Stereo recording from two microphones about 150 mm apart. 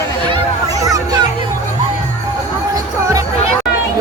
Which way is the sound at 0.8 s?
25° right (ahead or behind).